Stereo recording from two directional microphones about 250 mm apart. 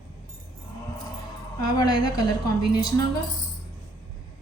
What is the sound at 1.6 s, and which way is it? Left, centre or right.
A woman's voice, centre.